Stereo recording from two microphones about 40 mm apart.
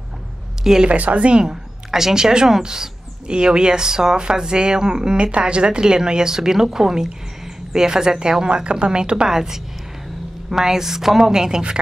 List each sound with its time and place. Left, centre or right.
0.8 s a woman's voice: right
1.4 s speech: centre